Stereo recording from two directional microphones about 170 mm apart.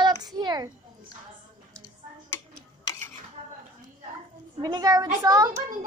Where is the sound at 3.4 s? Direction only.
40° right (ahead or behind).